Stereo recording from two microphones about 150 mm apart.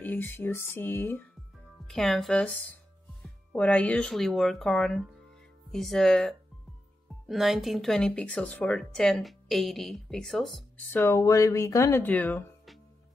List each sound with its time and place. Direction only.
0.0 s speech: 15° left (ahead or behind)
1.9 s speech: centre (ahead or behind)
10.9 s speech: 15° left (ahead or behind)